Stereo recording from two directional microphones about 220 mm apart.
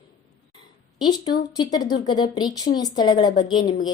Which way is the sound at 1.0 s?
20° left (ahead or behind).